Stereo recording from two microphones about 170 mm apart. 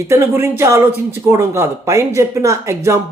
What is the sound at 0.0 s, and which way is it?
Speech, 15° right (ahead or behind).